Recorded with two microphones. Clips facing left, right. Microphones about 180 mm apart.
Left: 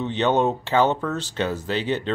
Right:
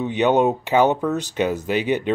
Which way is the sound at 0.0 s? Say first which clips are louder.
Right 3 dB; 15° right (ahead or behind).